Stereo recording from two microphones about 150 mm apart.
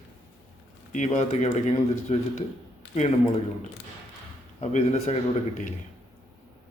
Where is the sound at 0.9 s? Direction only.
50° left (ahead or behind).